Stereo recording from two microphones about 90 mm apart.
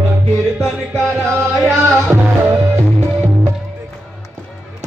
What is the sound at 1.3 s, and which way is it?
Music, 30° right (ahead or behind).